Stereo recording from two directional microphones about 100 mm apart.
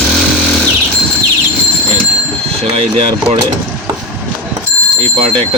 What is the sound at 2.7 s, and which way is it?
Speech, 90° right.